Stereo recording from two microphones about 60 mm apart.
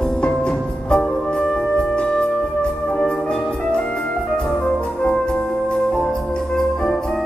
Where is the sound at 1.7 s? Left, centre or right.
Centre.